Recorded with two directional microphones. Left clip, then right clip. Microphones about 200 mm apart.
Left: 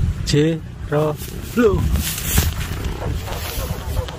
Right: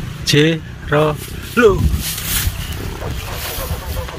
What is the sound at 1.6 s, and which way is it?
Speech, 15° right (ahead or behind).